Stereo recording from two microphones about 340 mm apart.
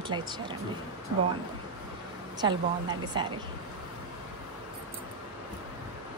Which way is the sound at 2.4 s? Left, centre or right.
Centre.